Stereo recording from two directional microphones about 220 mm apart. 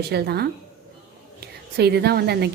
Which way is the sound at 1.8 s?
50° right (ahead or behind).